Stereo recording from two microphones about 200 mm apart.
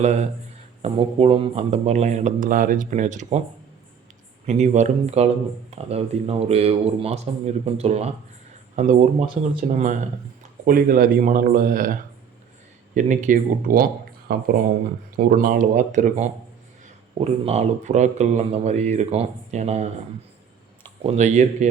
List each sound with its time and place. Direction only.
0.0 s speech: 35° right (ahead or behind)
4.4 s speech: 35° right (ahead or behind)
21.0 s speech: 35° right (ahead or behind)